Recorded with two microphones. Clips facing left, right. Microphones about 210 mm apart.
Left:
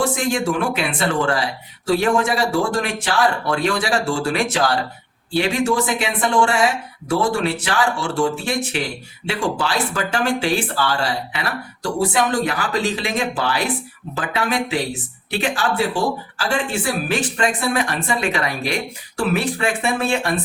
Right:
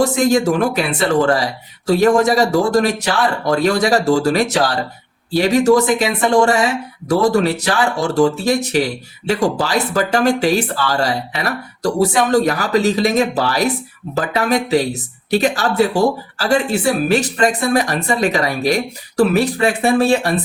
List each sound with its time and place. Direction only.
0.0 s speech: 40° right (ahead or behind)